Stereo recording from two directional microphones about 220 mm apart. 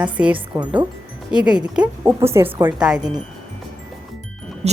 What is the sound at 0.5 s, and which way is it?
Speech, 20° right (ahead or behind).